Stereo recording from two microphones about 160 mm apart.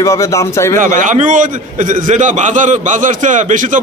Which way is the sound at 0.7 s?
55° right (ahead or behind).